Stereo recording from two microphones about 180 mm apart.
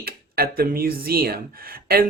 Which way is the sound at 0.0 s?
55° right (ahead or behind).